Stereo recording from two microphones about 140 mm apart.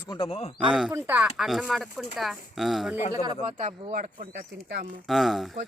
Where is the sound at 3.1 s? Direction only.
30° right (ahead or behind).